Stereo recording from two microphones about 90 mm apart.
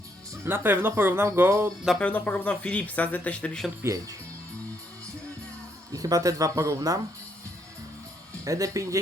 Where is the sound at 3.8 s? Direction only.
40° right (ahead or behind).